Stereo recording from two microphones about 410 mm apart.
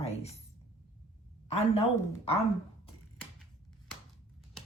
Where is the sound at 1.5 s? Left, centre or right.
Centre.